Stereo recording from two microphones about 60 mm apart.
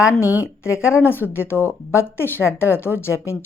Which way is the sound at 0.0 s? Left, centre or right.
Left.